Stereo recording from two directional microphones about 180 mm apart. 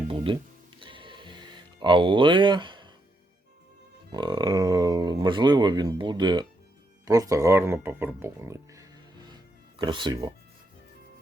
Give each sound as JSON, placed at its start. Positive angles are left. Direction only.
{"t": 0.3, "sound": "speech", "side_deg": -25}
{"t": 0.8, "sound": "music", "side_deg": -30}
{"t": 4.1, "sound": "speech", "side_deg": -25}